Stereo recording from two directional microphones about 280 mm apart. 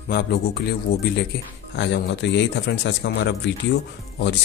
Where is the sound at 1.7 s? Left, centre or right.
Left.